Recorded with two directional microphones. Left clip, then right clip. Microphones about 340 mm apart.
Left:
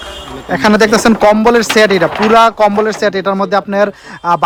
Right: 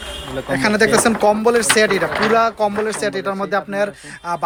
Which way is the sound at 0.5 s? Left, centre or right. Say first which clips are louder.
Left 6 dB; centre.